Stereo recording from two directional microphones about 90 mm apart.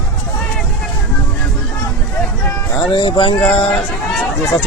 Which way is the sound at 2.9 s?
65° left (ahead or behind).